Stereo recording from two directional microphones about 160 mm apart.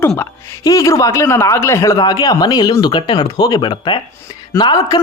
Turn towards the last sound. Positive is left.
turn(degrees=30)  # may be behind; listen again after turning